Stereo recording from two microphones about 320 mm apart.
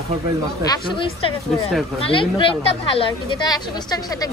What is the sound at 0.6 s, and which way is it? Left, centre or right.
Speech, centre.